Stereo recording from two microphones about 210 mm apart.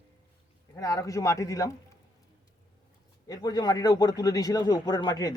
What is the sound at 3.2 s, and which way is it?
Speech, 15° left (ahead or behind).